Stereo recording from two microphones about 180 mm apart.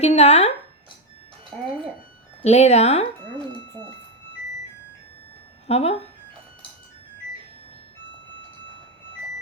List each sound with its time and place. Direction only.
0.0 s speech: 35° left (ahead or behind)
1.5 s speech: centre (ahead or behind)
2.4 s speech: 35° left (ahead or behind)
5.6 s speech: 35° left (ahead or behind)